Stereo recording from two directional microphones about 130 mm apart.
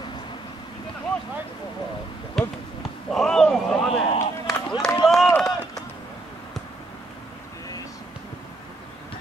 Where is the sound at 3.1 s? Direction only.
5° left (ahead or behind).